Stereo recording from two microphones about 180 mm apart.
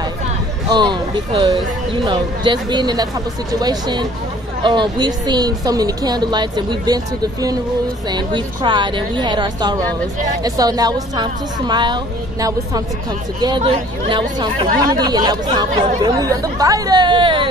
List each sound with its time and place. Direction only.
0.7 s speech: 25° right (ahead or behind)
8.1 s speech: 25° right (ahead or behind)